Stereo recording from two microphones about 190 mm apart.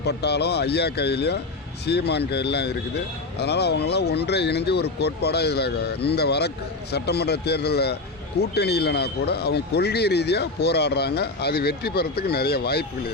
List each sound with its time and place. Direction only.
0.0 s speech: 60° left (ahead or behind)